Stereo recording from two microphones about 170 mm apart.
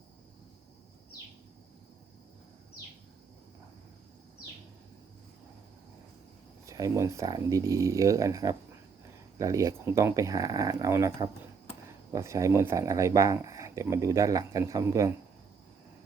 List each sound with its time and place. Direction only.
6.7 s speech: 20° right (ahead or behind)